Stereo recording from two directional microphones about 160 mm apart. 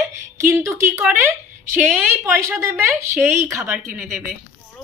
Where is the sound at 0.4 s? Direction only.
20° right (ahead or behind).